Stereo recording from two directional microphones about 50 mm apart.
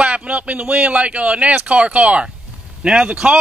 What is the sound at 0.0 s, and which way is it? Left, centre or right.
A man's voice, right.